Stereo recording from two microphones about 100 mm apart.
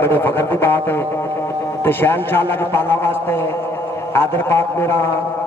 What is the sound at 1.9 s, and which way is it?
A man's voice, 20° left (ahead or behind).